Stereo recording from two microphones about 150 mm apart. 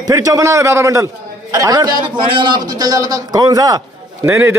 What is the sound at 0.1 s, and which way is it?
A man's voice, 20° right (ahead or behind).